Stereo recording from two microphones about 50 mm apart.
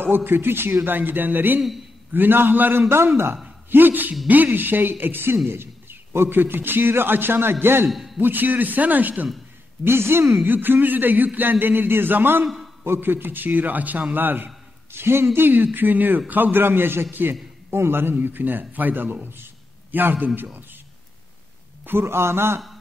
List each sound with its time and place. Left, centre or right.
0.0 s a man's voice: right
2.9 s a man's voice: right
3.7 s a man's voice: right
7.9 s a man's voice: centre
8.2 s a man's voice: right
9.8 s a man's voice: right
10.4 s a man's voice: right
18.1 s a man's voice: right
19.2 s a sound: right
21.8 s a man's voice: right